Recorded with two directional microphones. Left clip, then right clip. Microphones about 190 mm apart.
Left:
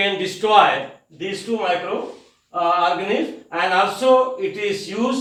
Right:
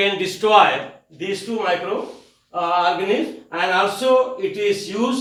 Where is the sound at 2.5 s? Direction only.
10° right (ahead or behind).